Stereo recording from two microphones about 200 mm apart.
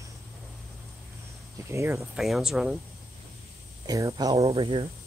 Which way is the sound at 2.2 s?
Centre (ahead or behind).